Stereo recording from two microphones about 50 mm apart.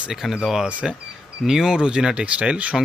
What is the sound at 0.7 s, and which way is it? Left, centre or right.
Speech, right.